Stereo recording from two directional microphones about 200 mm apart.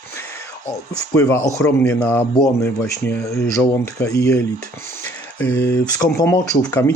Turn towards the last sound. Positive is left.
turn(degrees=15)  # may be behind; listen again after turning